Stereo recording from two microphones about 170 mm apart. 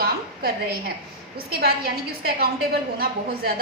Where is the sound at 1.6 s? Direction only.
65° right (ahead or behind).